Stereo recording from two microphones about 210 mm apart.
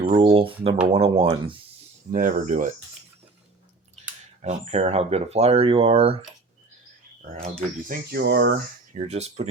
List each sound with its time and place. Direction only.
0.0 s speech: 25° right (ahead or behind)
2.1 s speech: 40° right (ahead or behind)
4.4 s speech: 30° right (ahead or behind)
7.9 s speech: 50° right (ahead or behind)
8.9 s speech: 35° right (ahead or behind)